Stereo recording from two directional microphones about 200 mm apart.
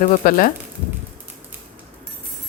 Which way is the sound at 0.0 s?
40° left (ahead or behind).